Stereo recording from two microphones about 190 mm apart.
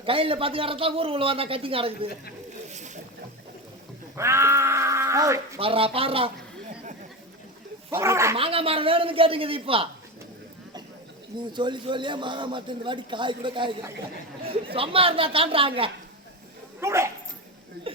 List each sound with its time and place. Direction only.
0.0 s a man's voice: 30° right (ahead or behind)
2.6 s boat: 40° right (ahead or behind)
4.1 s speech: 15° right (ahead or behind)
5.5 s a man's voice: 30° right (ahead or behind)
7.9 s speech: 15° right (ahead or behind)
8.4 s a man's voice: 30° right (ahead or behind)
11.3 s a man's voice: 25° right (ahead or behind)
16.8 s speech: 15° right (ahead or behind)